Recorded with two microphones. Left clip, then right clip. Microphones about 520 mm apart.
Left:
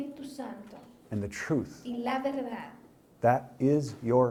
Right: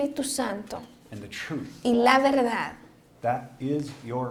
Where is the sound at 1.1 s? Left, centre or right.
Left.